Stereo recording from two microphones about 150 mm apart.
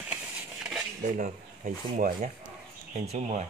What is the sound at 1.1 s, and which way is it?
Speech, 65° right (ahead or behind).